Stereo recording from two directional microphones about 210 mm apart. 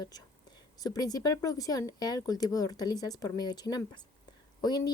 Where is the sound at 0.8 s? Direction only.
20° left (ahead or behind).